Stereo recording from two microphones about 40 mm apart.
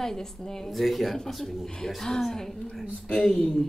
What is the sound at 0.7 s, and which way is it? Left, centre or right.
A man's voice, centre.